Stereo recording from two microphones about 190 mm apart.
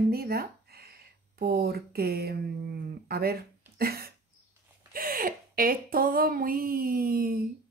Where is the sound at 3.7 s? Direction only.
55° right (ahead or behind).